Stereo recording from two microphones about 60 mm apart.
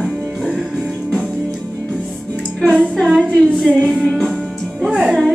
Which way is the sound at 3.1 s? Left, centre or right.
Centre.